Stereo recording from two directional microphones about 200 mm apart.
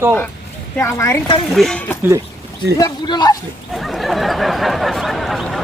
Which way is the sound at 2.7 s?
20° left (ahead or behind).